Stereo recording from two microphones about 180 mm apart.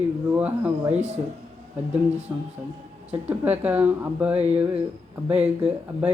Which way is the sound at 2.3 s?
20° right (ahead or behind).